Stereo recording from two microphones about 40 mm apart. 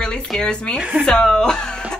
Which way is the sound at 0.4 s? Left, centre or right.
Left.